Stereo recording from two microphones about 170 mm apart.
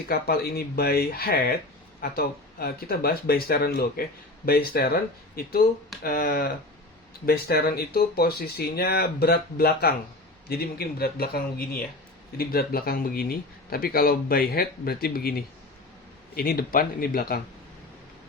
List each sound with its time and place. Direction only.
0.1 s speech: 65° left (ahead or behind)